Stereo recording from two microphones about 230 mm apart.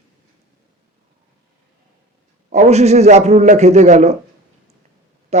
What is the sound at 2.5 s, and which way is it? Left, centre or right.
A man's voice, right.